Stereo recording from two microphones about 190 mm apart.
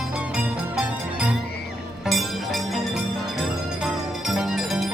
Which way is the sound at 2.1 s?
Centre (ahead or behind).